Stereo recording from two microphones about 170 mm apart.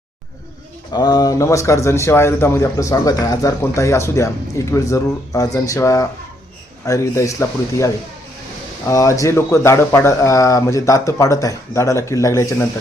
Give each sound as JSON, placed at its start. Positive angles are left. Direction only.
{"t": 0.9, "sound": "speech", "side_deg": 25}
{"t": 8.9, "sound": "speech", "side_deg": 20}